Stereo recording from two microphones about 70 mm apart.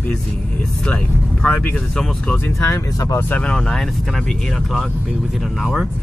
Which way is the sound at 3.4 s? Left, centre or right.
Centre.